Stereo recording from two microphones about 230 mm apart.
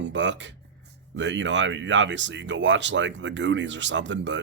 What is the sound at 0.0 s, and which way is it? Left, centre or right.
Speech, right.